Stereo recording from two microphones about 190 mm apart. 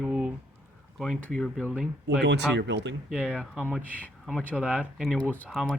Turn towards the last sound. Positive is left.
turn(degrees=0)  # may be behind; listen again after turning